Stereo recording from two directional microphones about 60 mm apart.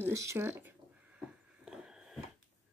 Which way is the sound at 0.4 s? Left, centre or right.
Right.